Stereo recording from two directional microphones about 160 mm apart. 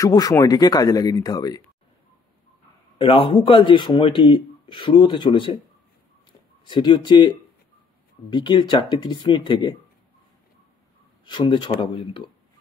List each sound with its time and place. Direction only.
0.0 s speech: 20° left (ahead or behind)
3.0 s speech: 35° left (ahead or behind)
6.6 s speech: 30° left (ahead or behind)
11.2 s speech: 30° left (ahead or behind)